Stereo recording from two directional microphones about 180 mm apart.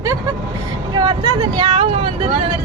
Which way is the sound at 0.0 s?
15° right (ahead or behind).